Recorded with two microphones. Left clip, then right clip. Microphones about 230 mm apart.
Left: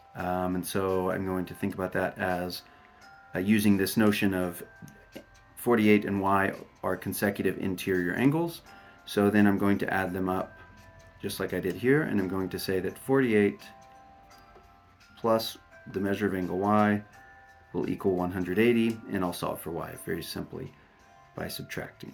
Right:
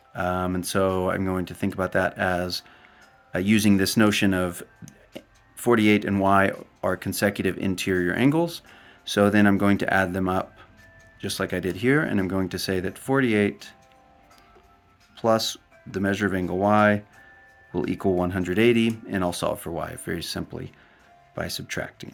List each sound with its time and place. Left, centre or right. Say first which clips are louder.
0.1 s speech: right 4 dB; right
15.1 s speech: right 5 dB; right